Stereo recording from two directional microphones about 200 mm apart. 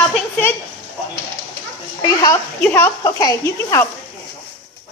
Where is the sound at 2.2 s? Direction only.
15° left (ahead or behind).